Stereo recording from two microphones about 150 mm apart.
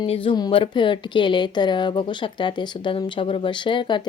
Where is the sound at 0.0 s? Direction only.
35° left (ahead or behind).